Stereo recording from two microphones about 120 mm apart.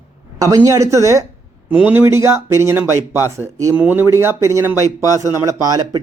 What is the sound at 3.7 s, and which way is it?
Speech, 15° right (ahead or behind).